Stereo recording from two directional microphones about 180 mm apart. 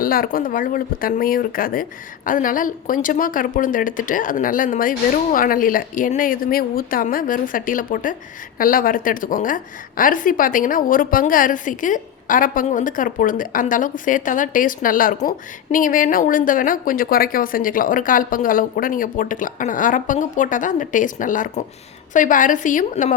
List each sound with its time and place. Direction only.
0.0 s speech: 50° left (ahead or behind)